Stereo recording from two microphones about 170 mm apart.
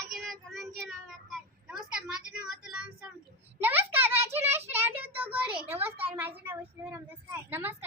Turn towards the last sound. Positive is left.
turn(degrees=-10)  # may be behind; listen again after turning